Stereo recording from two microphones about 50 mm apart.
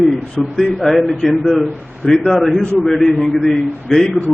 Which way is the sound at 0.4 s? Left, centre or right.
Centre.